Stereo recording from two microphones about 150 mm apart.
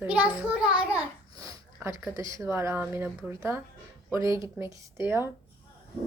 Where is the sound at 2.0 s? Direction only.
20° right (ahead or behind).